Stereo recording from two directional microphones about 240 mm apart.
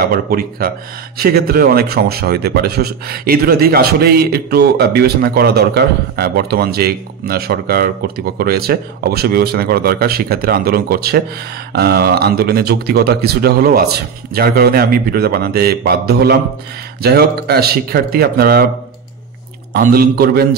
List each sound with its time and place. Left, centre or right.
0.0 s speech: right
19.7 s speech: right